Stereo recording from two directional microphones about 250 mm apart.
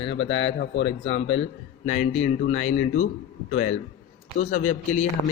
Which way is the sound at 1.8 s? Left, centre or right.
Left.